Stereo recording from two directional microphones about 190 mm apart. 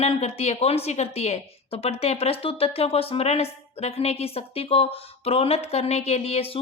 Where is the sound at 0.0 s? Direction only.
35° left (ahead or behind).